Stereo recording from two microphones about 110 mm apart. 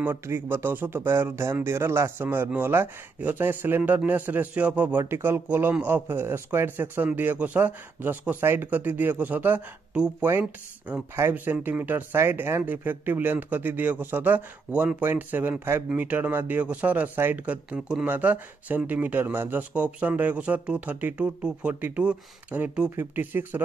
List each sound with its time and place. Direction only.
0.0 s speech: 20° right (ahead or behind)
11.1 s speech: 20° right (ahead or behind)